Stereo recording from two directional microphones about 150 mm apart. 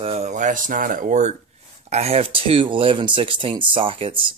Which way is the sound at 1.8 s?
45° right (ahead or behind).